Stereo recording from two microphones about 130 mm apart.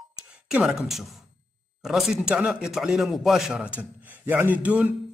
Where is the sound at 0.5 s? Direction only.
5° right (ahead or behind).